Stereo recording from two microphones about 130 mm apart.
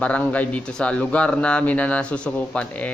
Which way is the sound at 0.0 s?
10° left (ahead or behind).